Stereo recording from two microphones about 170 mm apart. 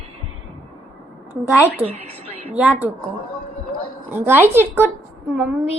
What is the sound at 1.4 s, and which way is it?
Speech, 5° right (ahead or behind).